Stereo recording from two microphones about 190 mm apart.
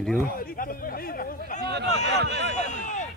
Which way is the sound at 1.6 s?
60° right (ahead or behind).